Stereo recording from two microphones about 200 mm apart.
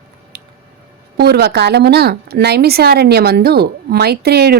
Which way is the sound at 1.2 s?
55° right (ahead or behind).